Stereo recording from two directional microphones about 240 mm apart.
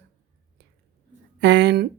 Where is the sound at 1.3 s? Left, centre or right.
Right.